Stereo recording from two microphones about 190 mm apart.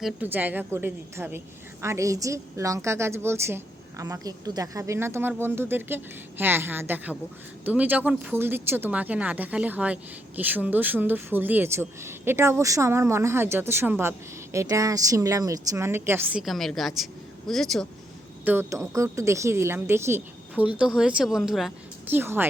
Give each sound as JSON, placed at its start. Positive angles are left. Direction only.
{"t": 0.0, "sound": "speech", "side_deg": -10}
{"t": 18.4, "sound": "speech", "side_deg": -15}